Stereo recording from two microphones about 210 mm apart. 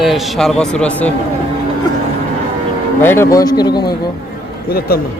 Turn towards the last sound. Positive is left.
turn(degrees=45)  # may be behind; listen again after turning